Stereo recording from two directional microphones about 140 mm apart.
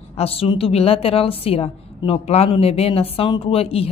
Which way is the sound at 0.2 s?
45° left (ahead or behind).